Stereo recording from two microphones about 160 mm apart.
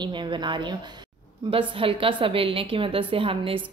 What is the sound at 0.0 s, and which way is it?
A woman's voice, 30° right (ahead or behind).